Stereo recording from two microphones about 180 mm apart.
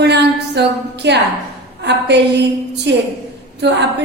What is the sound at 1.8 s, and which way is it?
A woman's voice, 70° right (ahead or behind).